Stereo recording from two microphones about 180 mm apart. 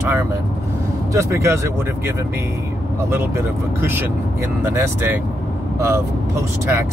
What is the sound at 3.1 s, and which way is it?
Speech, 15° right (ahead or behind).